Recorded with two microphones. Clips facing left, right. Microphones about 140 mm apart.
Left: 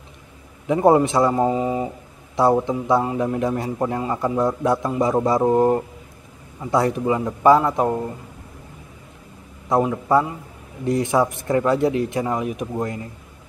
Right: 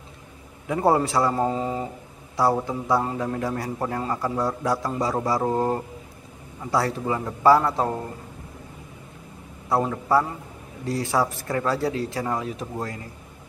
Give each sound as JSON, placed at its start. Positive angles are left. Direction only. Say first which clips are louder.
{"t": 0.7, "sound": "a man's voice", "louder": "left 5 dB", "side_deg": 20}
{"t": 9.7, "sound": "a man's voice", "louder": "left 4 dB", "side_deg": 20}